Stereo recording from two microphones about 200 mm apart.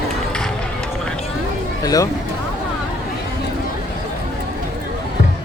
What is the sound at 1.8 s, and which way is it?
Speech, 15° left (ahead or behind).